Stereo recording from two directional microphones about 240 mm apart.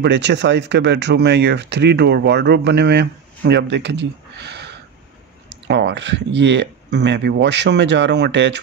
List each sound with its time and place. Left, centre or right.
0.0 s speech: right